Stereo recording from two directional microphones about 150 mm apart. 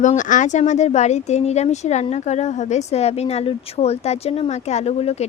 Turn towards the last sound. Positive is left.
turn(degrees=45)  # may be behind; listen again after turning